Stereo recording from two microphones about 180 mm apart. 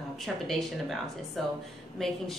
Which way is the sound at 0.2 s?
Centre (ahead or behind).